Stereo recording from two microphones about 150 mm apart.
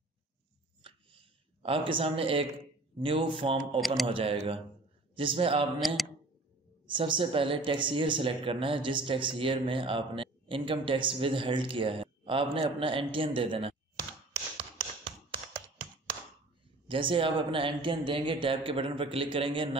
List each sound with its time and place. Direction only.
0.8 s a sound: 40° right (ahead or behind)
3.0 s speech: 35° right (ahead or behind)
3.8 s a man's voice: centre (ahead or behind)
4.1 s speech: 40° right (ahead or behind)
5.8 s a man's voice: centre (ahead or behind)
6.9 s speech: 35° right (ahead or behind)
16.8 s speech: 35° right (ahead or behind)